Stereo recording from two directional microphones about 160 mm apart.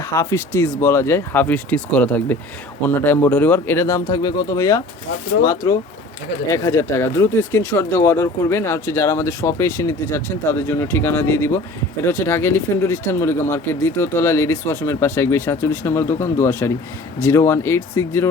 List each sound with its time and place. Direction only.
0.0 s speech: 20° left (ahead or behind)